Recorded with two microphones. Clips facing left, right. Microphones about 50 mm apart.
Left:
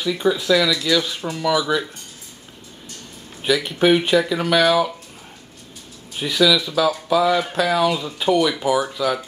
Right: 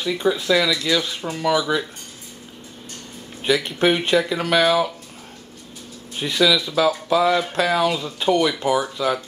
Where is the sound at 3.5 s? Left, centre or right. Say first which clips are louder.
Left 2 dB; centre.